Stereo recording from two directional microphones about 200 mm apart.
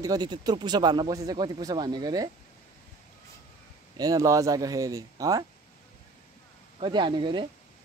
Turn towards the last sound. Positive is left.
turn(degrees=-25)  # may be behind; listen again after turning